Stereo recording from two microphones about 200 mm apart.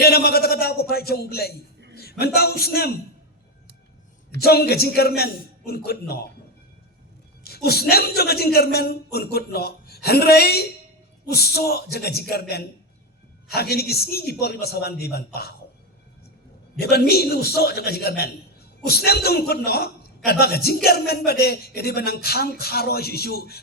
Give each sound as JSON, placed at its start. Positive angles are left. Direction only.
{"t": 0.0, "sound": "a sound", "side_deg": 50}
{"t": 2.0, "sound": "a man's voice", "side_deg": 50}
{"t": 4.4, "sound": "a man's voice", "side_deg": 50}
{"t": 7.4, "sound": "a man's voice", "side_deg": 50}
{"t": 16.8, "sound": "a man's voice", "side_deg": 50}